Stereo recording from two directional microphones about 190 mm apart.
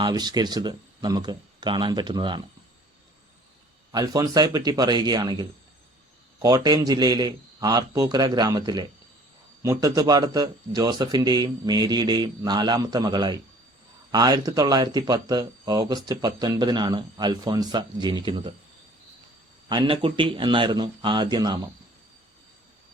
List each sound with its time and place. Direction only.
0.0 s speech: 20° right (ahead or behind)
3.9 s speech: 20° right (ahead or behind)
19.6 s speech: 25° right (ahead or behind)